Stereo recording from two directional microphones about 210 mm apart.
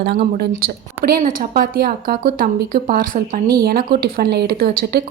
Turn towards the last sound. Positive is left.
turn(degrees=-45)  # may be behind; listen again after turning